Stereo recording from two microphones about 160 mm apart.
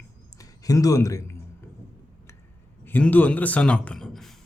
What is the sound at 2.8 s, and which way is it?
Speech, 10° left (ahead or behind).